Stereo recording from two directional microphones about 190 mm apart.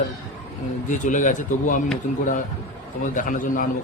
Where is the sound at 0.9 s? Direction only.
40° left (ahead or behind).